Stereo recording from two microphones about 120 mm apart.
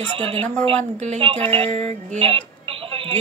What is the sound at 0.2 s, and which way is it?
Speech, 55° right (ahead or behind).